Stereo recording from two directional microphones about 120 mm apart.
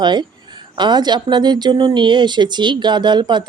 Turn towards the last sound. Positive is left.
turn(degrees=-40)  # may be behind; listen again after turning